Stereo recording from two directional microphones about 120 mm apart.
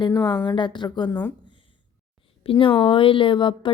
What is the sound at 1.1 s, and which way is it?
Speech, 20° left (ahead or behind).